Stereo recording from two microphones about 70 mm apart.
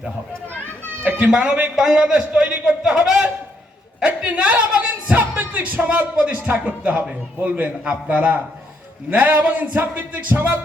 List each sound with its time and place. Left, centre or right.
1.1 s a man's voice: centre